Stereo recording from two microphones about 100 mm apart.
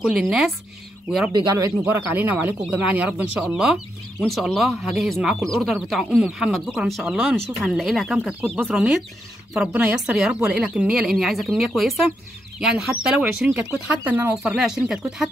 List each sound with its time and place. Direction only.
0.0 s speech: 5° right (ahead or behind)
1.6 s speech: 20° right (ahead or behind); by 8.4 s centre (ahead or behind)
8.4 s speech: 20° right (ahead or behind)
8.6 s speech: 5° right (ahead or behind)
14.3 s speech: 5° right (ahead or behind)